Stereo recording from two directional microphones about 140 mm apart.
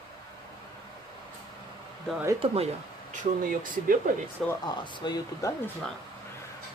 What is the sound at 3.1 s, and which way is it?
Speech, 70° right (ahead or behind).